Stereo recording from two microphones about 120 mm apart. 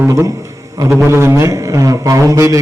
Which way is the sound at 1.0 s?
20° right (ahead or behind).